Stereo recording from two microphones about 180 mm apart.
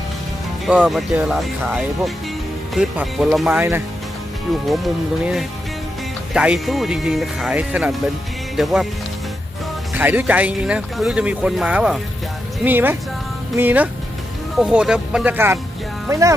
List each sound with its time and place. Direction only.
0.6 s speech: 5° right (ahead or behind)
9.9 s speech: 10° right (ahead or behind)